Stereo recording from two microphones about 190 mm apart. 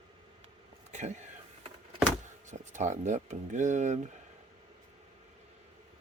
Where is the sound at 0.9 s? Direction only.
40° right (ahead or behind).